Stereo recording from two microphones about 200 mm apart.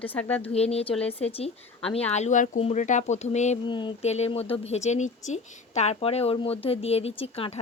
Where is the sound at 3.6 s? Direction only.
25° left (ahead or behind).